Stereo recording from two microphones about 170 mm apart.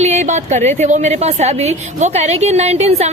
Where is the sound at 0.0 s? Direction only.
45° right (ahead or behind).